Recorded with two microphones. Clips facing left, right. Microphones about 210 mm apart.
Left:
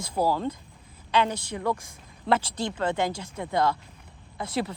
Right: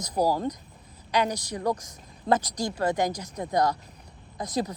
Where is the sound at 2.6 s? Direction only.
40° right (ahead or behind).